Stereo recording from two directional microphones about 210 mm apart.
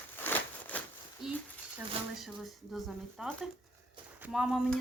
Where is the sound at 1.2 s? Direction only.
Centre (ahead or behind).